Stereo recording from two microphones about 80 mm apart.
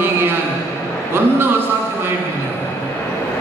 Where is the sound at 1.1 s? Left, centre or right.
Right.